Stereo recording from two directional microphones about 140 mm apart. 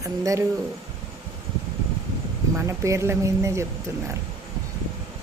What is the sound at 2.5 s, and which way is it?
Speech, 20° right (ahead or behind).